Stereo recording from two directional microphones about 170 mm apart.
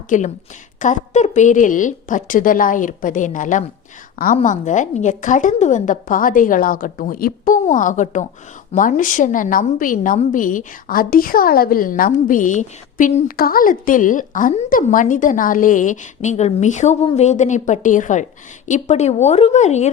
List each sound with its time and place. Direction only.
0.1 s a woman's voice: 50° left (ahead or behind)